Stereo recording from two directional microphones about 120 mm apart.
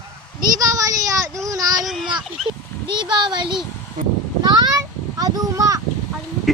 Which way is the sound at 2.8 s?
40° right (ahead or behind).